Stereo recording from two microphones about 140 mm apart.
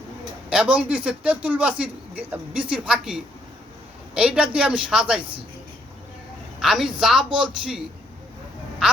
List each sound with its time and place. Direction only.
0.5 s a man's voice: 10° right (ahead or behind)
6.6 s speech: 5° right (ahead or behind)